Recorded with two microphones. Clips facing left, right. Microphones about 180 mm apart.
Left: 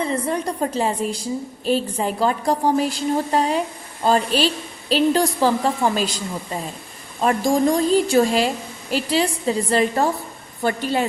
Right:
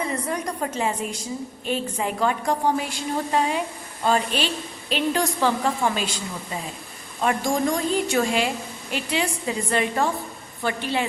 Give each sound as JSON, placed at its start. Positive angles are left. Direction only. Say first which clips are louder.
{"t": 0.1, "sound": "a woman's voice", "louder": "left 4 dB", "side_deg": 30}